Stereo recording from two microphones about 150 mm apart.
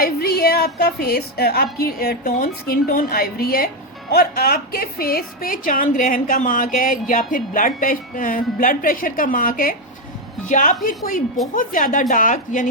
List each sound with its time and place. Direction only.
0.0 s a woman's voice: 90° left; by 12.6 s 60° left (ahead or behind)